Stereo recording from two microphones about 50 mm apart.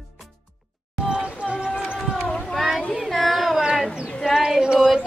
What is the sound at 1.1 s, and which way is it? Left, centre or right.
Music, centre.